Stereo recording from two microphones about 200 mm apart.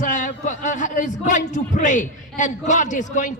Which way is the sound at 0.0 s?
40° left (ahead or behind).